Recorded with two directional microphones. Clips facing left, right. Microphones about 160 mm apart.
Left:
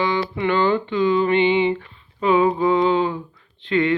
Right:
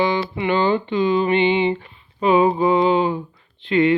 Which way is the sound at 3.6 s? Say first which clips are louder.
Right 3 dB; 15° right (ahead or behind).